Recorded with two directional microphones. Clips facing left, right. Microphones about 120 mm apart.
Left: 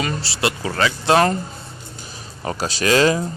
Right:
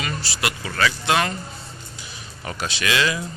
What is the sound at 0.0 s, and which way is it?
Speech, 30° left (ahead or behind).